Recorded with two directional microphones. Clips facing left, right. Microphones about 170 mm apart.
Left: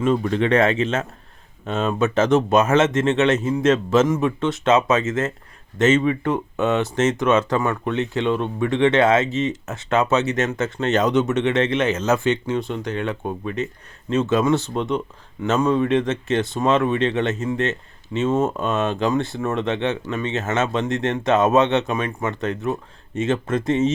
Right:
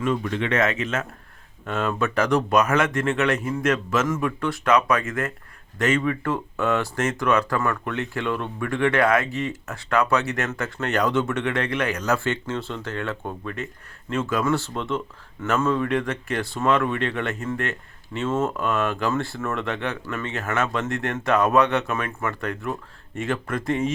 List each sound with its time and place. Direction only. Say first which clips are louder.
0.0 s speech: left 5 dB; 35° left (ahead or behind)